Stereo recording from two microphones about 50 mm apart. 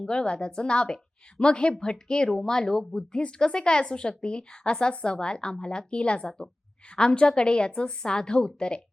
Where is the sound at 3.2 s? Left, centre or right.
Centre.